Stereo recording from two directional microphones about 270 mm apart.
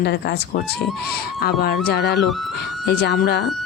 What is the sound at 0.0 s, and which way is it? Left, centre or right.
Speech, left.